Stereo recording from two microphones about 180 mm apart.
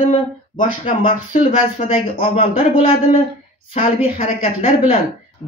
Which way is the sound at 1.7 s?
30° left (ahead or behind).